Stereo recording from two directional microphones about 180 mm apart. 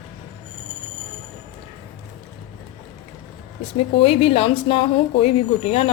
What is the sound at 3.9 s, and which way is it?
Speech, 35° left (ahead or behind).